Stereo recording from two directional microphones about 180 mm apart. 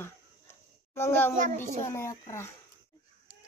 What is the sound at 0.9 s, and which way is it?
Speech, 15° left (ahead or behind).